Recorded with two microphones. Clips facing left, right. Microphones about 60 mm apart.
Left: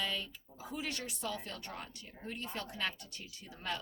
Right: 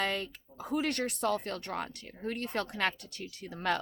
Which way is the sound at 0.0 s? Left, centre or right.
Right.